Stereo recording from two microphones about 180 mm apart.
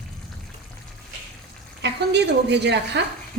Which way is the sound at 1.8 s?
70° right (ahead or behind).